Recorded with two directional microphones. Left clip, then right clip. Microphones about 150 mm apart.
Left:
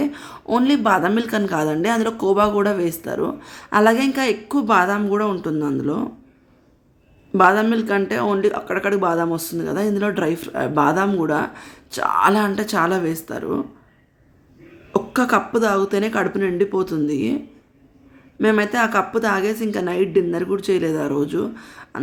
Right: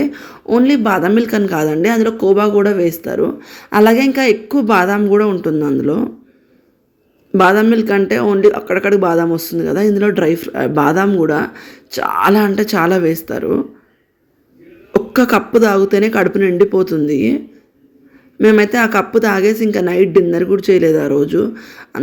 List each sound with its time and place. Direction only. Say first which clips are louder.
0.0 s a man's voice: right 5 dB; 10° right (ahead or behind)
7.3 s a man's voice: right 5 dB; 15° right (ahead or behind)
14.9 s speech: right 5 dB; 20° right (ahead or behind)